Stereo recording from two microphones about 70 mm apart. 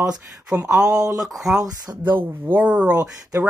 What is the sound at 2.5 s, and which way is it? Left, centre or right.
Speech, centre.